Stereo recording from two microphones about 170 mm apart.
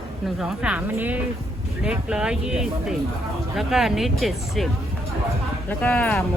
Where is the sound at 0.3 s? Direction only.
5° right (ahead or behind).